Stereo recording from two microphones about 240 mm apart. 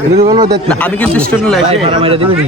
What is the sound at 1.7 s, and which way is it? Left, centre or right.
Speech, right.